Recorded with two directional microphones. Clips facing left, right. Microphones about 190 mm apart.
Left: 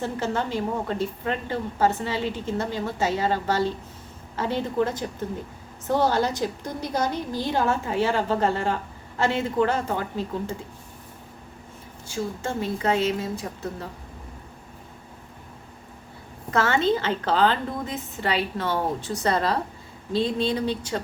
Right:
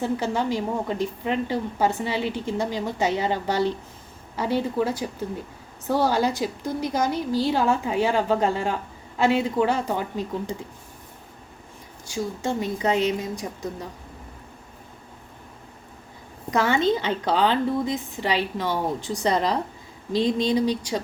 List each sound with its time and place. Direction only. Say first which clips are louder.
0.0 s a woman's voice: right 2 dB; 10° right (ahead or behind)
12.0 s a woman's voice: right 2 dB; 15° right (ahead or behind)
16.5 s a woman's voice: right 1 dB; 15° right (ahead or behind)